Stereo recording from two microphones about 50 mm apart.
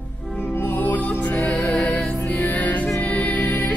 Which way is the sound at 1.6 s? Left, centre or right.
Centre.